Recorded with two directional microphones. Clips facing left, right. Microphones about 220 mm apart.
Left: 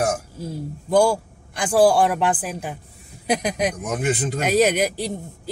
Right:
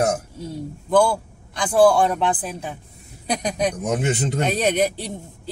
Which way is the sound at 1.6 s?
5° left (ahead or behind).